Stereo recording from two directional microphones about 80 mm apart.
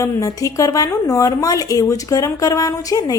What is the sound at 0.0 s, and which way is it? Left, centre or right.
A woman's voice, left.